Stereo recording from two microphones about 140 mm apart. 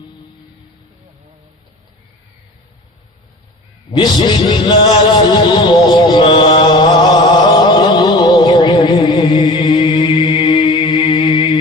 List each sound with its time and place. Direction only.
3.9 s music: 35° left (ahead or behind)